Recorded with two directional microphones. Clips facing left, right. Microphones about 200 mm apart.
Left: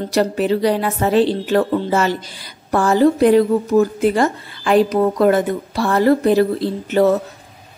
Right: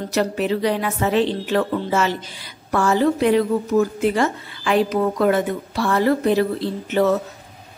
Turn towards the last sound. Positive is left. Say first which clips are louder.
# left 4 dB
turn(degrees=40)  # may be behind; listen again after turning